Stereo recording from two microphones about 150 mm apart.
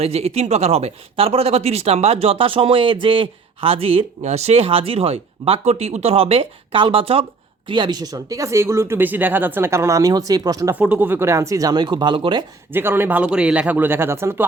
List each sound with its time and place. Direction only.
0.0 s speech: 45° right (ahead or behind); by 10.8 s 25° right (ahead or behind)
10.8 s speech: 10° right (ahead or behind); by 12.5 s 35° right (ahead or behind)
12.7 s speech: 15° right (ahead or behind)